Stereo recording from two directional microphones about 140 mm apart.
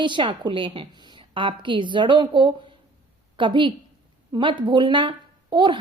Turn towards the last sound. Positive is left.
turn(degrees=-35)  # may be behind; listen again after turning